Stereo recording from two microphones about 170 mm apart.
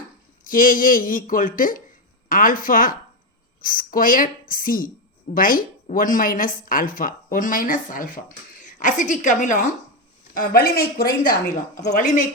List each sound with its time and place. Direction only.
0.4 s a woman's voice: 55° left (ahead or behind)
10.3 s a woman's voice: 60° left (ahead or behind)